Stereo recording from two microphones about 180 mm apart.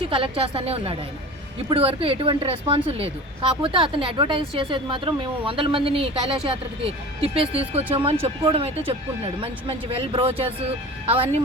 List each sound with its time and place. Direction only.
0.1 s speech: 30° right (ahead or behind)